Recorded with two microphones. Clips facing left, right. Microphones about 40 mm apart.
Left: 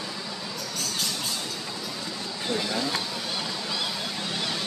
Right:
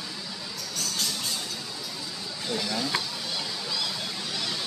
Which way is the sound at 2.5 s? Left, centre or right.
Centre.